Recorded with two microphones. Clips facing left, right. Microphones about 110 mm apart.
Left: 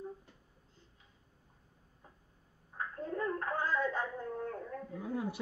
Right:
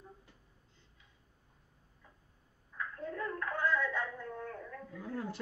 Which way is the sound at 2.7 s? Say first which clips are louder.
Left 2 dB; 35° left (ahead or behind).